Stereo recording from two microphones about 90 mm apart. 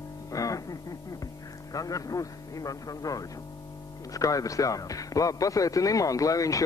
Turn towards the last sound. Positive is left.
turn(degrees=40)  # may be behind; listen again after turning